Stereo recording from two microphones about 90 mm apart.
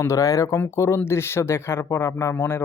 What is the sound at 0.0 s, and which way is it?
Speech, 35° left (ahead or behind).